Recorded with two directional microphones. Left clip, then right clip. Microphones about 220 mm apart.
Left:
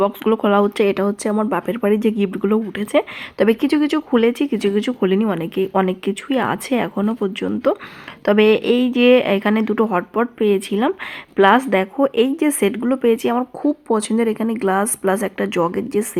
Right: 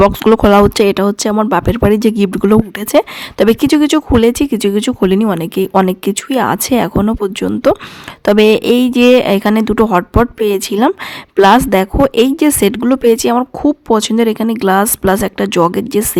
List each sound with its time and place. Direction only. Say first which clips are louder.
0.0 s speech: right 9 dB; 45° right (ahead or behind)